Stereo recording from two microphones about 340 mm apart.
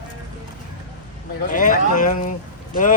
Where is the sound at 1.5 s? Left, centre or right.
Left.